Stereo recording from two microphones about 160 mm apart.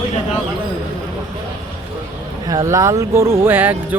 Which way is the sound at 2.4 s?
20° right (ahead or behind).